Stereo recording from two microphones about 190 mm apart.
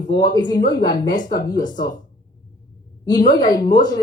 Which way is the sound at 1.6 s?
45° left (ahead or behind).